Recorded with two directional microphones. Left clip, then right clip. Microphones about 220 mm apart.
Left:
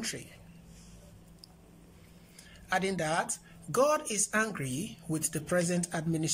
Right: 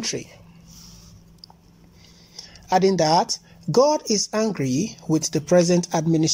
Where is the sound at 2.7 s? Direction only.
20° right (ahead or behind).